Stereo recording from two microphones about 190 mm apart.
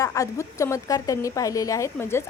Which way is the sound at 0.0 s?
15° left (ahead or behind).